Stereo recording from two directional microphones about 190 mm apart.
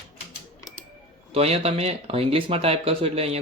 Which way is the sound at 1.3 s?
30° right (ahead or behind).